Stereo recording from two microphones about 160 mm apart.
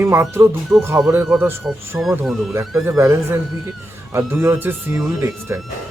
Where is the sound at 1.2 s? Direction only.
Centre (ahead or behind).